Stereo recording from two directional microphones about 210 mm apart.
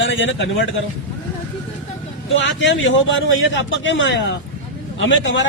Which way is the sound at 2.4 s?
60° left (ahead or behind).